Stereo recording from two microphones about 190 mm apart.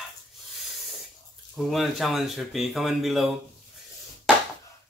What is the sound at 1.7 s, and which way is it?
Speech, centre (ahead or behind).